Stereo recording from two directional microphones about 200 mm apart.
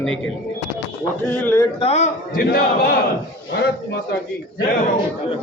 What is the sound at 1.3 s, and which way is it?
Speech, 10° left (ahead or behind).